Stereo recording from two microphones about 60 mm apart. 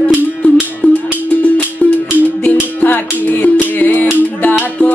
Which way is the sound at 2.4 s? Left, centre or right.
Left.